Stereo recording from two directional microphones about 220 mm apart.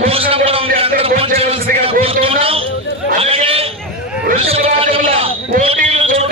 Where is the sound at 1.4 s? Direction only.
25° right (ahead or behind).